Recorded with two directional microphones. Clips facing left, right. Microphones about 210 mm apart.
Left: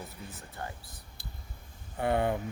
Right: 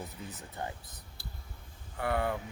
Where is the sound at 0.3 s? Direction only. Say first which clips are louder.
Right 2 dB; 20° right (ahead or behind).